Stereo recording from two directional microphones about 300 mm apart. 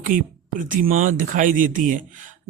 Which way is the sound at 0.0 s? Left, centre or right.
Right.